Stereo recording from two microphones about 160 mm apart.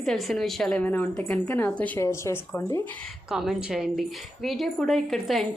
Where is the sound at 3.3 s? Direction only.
5° right (ahead or behind).